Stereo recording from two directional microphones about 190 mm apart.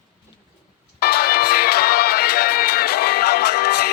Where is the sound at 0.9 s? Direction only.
55° left (ahead or behind).